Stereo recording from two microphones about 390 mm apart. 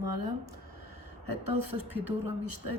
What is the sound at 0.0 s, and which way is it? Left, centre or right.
Speech, right.